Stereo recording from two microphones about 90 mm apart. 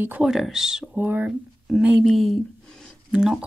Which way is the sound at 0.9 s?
20° right (ahead or behind).